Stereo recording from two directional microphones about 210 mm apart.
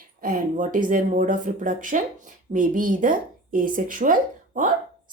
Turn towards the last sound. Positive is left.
turn(degrees=-40)  # may be behind; listen again after turning